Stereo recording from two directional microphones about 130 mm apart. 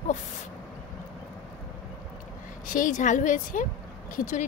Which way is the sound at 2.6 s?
90° left.